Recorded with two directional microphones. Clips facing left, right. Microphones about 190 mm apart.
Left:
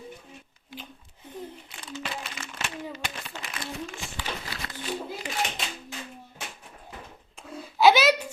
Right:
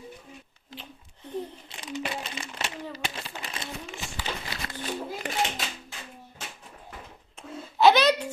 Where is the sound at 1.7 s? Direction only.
15° right (ahead or behind).